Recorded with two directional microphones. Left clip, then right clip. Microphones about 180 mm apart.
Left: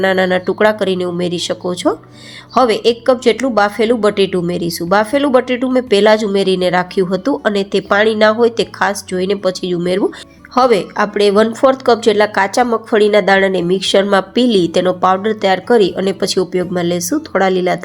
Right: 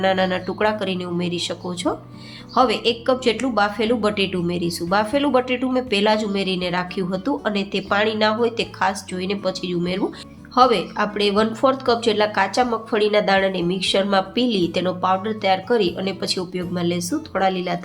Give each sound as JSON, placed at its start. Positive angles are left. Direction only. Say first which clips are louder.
{"t": 0.0, "sound": "a woman's voice", "louder": "left 6 dB", "side_deg": 35}